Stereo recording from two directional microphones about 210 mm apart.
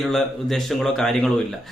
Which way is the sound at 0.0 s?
Centre (ahead or behind).